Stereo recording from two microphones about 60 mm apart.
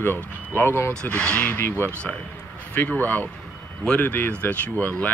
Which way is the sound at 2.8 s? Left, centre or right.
Left.